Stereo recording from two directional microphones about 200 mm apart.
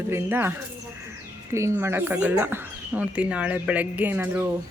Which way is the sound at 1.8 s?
10° right (ahead or behind).